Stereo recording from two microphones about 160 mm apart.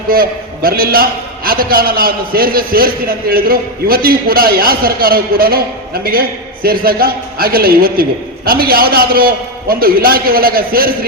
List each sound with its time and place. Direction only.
0.1 s a man's voice: 65° right (ahead or behind)